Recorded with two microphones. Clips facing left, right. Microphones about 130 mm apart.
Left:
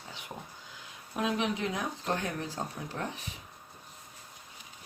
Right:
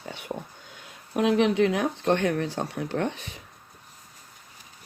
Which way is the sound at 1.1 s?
70° right (ahead or behind).